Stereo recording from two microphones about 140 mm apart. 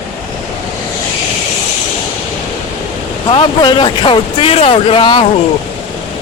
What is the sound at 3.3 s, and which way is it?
Speech, 35° left (ahead or behind).